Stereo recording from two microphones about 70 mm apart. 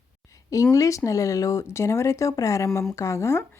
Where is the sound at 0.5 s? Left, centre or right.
Left.